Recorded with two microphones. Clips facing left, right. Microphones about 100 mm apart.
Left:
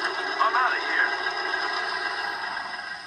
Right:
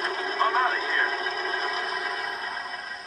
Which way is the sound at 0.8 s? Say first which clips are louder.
Left 1 dB; 70° left (ahead or behind).